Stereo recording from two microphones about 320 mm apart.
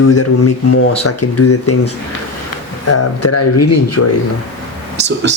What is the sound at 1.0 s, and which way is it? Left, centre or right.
Speech, left.